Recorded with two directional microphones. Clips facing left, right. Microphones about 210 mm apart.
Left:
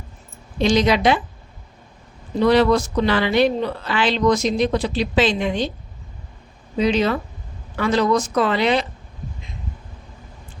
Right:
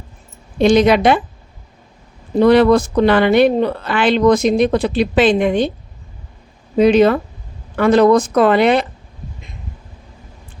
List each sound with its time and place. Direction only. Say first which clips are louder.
0.6 s speech: right 6 dB; 55° right (ahead or behind)
2.4 s speech: right 5 dB; 55° right (ahead or behind)
6.7 s speech: right 8 dB; 55° right (ahead or behind)